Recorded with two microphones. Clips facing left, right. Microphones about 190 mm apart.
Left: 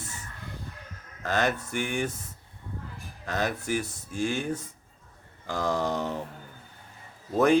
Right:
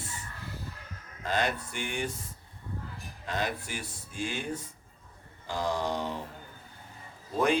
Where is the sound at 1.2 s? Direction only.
45° left (ahead or behind).